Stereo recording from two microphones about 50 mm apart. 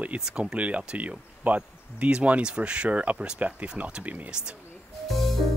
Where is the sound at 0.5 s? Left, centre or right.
Right.